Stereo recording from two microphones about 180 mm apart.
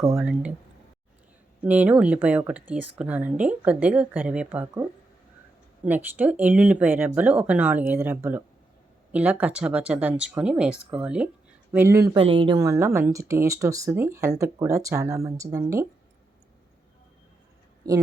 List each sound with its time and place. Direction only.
0.0 s speech: 15° right (ahead or behind)
1.6 s speech: 10° right (ahead or behind)
5.8 s speech: 10° right (ahead or behind)
12.1 s speech: 30° right (ahead or behind)
12.5 s speech: 15° right (ahead or behind)